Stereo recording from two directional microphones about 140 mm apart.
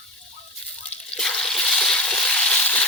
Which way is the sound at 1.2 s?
5° left (ahead or behind).